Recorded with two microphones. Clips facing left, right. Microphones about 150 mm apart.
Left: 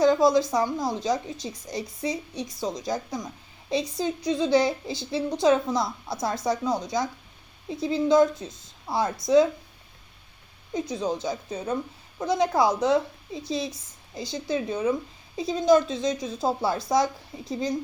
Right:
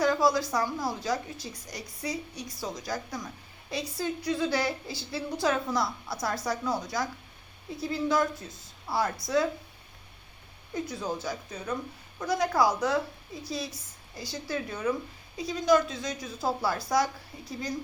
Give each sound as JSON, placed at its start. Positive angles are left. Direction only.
{"t": 0.0, "sound": "a woman's voice", "side_deg": 20}
{"t": 10.8, "sound": "a woman's voice", "side_deg": 20}